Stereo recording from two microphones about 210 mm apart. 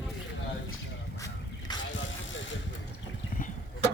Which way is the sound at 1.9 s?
60° left (ahead or behind).